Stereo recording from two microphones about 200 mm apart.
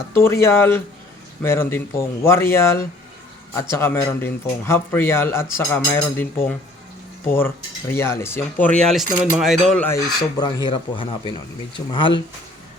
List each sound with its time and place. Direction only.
0.1 s speech: 10° left (ahead or behind)
7.3 s speech: 10° left (ahead or behind)